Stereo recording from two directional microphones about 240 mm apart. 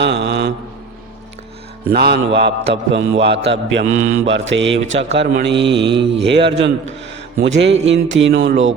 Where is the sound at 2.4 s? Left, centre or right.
Right.